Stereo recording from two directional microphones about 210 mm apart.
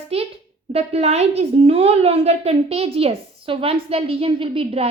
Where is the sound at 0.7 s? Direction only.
30° right (ahead or behind).